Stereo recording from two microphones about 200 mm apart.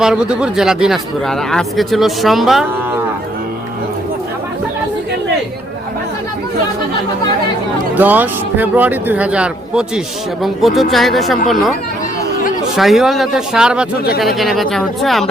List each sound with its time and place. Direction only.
0.0 s speech: 5° right (ahead or behind)
7.9 s speech: 10° right (ahead or behind)
12.7 s speech: centre (ahead or behind)